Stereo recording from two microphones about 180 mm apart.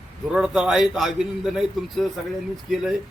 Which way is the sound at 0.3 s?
5° right (ahead or behind).